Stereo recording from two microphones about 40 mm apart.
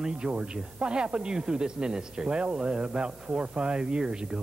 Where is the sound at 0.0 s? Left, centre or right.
Right.